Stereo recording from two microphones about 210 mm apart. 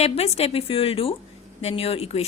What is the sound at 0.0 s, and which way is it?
A woman's voice, 30° left (ahead or behind).